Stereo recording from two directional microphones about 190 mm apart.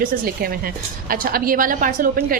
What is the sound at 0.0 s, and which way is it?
A woman's voice, 50° right (ahead or behind).